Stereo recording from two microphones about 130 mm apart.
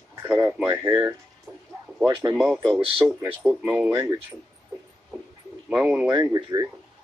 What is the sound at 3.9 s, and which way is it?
Speech, 25° right (ahead or behind).